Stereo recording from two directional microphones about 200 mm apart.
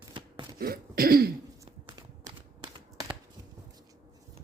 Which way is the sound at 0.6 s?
50° right (ahead or behind).